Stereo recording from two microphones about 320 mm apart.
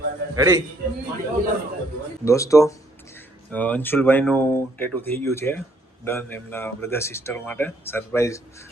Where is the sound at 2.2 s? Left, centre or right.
Centre.